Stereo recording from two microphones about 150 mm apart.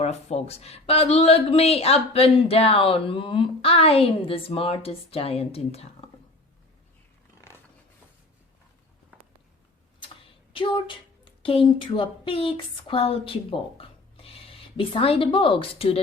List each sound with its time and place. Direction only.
0.0 s speech: 45° left (ahead or behind)
10.5 s a woman's voice: 35° left (ahead or behind)